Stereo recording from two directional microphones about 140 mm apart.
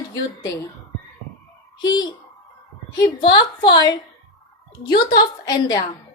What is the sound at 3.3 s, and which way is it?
Speech, 30° left (ahead or behind).